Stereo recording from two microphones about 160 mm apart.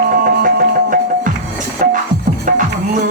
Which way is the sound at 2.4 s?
55° right (ahead or behind).